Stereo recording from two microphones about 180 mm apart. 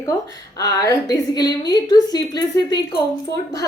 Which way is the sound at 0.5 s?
20° left (ahead or behind).